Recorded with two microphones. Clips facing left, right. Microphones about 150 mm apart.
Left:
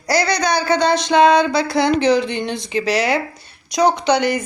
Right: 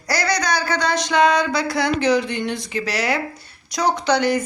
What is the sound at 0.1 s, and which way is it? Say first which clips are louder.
Speech: left 4 dB; 25° left (ahead or behind).